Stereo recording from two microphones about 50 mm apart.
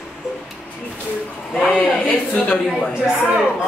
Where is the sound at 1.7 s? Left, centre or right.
Left.